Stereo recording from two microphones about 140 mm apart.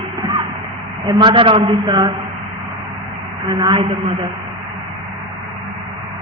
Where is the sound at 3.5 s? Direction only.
35° right (ahead or behind).